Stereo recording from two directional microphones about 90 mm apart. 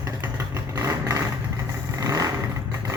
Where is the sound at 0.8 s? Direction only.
40° right (ahead or behind).